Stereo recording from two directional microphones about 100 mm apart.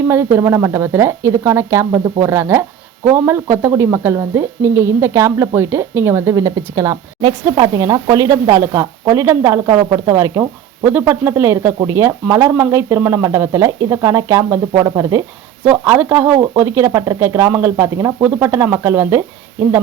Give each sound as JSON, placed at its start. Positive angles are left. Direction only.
{"t": 0.1, "sound": "speech", "side_deg": -25}
{"t": 15.6, "sound": "speech", "side_deg": -15}